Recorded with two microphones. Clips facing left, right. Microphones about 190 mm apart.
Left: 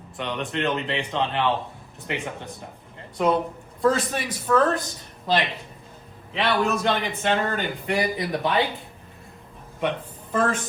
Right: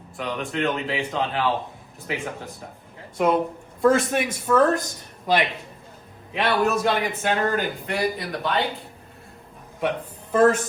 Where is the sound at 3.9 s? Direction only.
55° right (ahead or behind).